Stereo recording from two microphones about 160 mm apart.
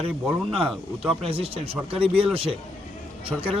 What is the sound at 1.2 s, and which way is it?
A man's voice, 35° right (ahead or behind).